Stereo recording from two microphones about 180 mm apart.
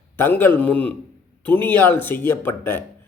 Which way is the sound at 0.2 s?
10° left (ahead or behind).